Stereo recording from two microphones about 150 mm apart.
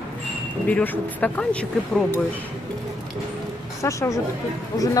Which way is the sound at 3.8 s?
20° left (ahead or behind).